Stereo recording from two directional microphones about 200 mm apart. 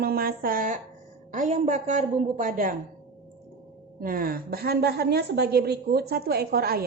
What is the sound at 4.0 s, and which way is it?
A woman's voice, 45° right (ahead or behind).